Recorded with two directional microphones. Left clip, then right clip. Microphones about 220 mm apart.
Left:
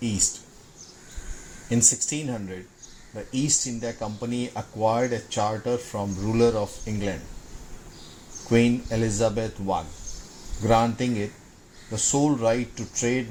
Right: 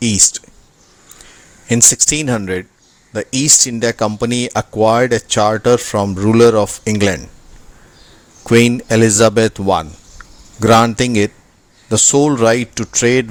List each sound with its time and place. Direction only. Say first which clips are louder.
1.7 s speech: right 11 dB; 40° right (ahead or behind)
8.4 s speech: right 11 dB; 45° right (ahead or behind)